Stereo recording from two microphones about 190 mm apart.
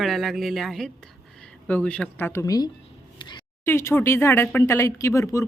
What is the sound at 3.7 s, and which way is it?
Mantra, 10° left (ahead or behind).